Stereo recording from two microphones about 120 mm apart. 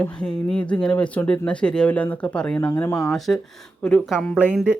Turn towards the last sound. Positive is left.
turn(degrees=-10)  # may be behind; listen again after turning